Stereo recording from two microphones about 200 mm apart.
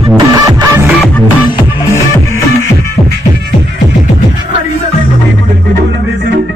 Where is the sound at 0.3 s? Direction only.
20° right (ahead or behind).